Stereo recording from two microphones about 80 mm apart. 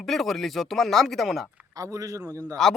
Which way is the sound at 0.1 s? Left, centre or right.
Centre.